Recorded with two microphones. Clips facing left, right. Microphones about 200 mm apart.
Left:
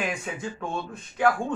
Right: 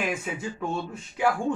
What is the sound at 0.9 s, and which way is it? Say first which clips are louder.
Speech: left 4 dB; 10° right (ahead or behind).